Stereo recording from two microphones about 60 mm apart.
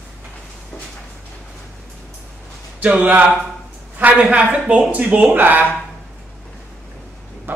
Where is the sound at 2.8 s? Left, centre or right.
Right.